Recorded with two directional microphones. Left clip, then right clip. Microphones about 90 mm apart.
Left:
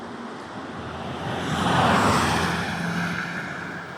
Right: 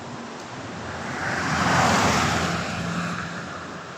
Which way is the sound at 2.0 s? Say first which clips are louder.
Left 1 dB; 15° left (ahead or behind).